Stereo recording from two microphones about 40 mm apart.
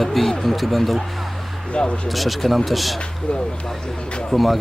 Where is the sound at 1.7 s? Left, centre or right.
Left.